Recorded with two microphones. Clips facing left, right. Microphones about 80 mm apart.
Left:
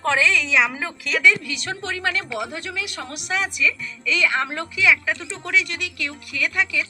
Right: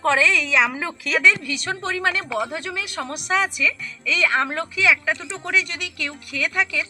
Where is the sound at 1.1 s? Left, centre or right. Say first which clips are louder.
Even; right.